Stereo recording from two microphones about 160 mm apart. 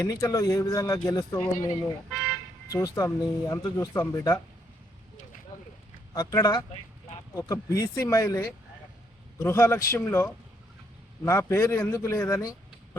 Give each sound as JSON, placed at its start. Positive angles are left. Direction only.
{"t": 0.0, "sound": "speech", "side_deg": 20}
{"t": 2.0, "sound": "car alarm", "side_deg": 0}
{"t": 2.6, "sound": "speech", "side_deg": 20}
{"t": 6.1, "sound": "a man's voice", "side_deg": 25}